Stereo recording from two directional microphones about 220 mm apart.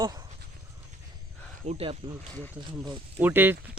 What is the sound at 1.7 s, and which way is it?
Speech, 25° right (ahead or behind).